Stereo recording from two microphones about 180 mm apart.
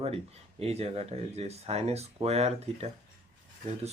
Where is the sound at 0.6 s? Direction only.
35° right (ahead or behind).